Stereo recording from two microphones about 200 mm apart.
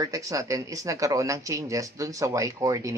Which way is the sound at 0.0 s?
15° right (ahead or behind).